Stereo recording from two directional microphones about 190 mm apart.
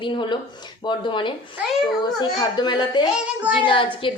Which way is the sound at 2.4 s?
20° left (ahead or behind).